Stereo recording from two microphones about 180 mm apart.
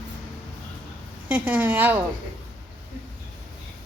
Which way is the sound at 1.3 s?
10° right (ahead or behind).